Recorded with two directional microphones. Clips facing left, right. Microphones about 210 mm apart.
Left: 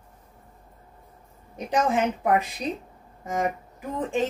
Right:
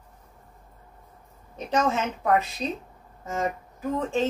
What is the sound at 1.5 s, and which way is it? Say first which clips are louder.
A woman's voice: left 1 dB; 15° left (ahead or behind).